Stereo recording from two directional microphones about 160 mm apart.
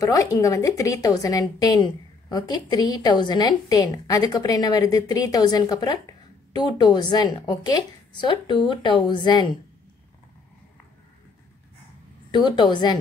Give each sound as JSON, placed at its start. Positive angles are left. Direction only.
{"t": 0.0, "sound": "a woman's voice", "side_deg": 20}
{"t": 12.3, "sound": "a woman's voice", "side_deg": 30}